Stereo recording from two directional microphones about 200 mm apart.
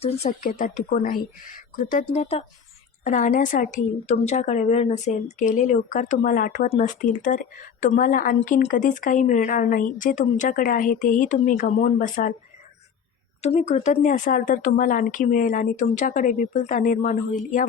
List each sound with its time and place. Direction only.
0.0 s a woman's voice: 30° left (ahead or behind)
0.4 s a woman's voice: 45° left (ahead or behind)
13.4 s a woman's voice: 30° left (ahead or behind)